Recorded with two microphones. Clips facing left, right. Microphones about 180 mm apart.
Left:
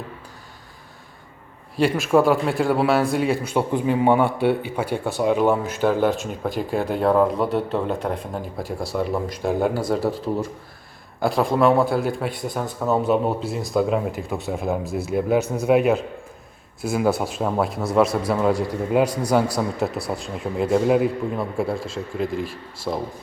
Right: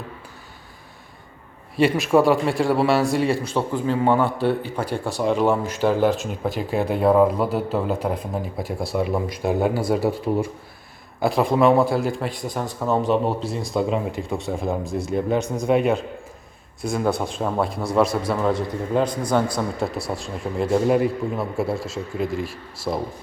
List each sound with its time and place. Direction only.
1.8 s a man's voice: centre (ahead or behind)
3.7 s a man's voice: 15° left (ahead or behind)
19.0 s a man's voice: 70° left (ahead or behind)
19.5 s a man's voice: centre (ahead or behind)